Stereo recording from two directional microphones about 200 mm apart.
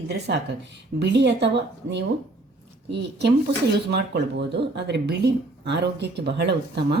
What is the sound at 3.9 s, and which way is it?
Speech, 55° right (ahead or behind).